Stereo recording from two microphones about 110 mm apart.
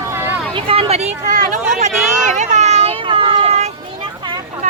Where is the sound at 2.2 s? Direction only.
90° right; by 3.7 s 65° right (ahead or behind).